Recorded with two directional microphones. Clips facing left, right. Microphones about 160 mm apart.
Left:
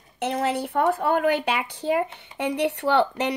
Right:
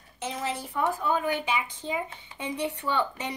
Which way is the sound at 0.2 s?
65° left (ahead or behind).